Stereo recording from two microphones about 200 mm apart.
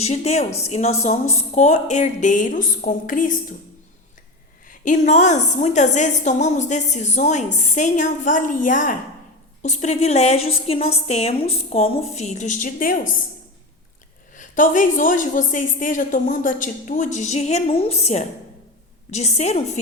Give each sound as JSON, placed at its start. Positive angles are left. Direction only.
{"t": 0.0, "sound": "a woman's voice", "side_deg": 35}
{"t": 4.7, "sound": "a woman's voice", "side_deg": 35}
{"t": 14.3, "sound": "a woman's voice", "side_deg": 40}